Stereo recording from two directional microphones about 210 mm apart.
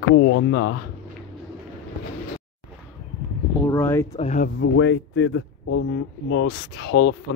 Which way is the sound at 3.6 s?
10° left (ahead or behind).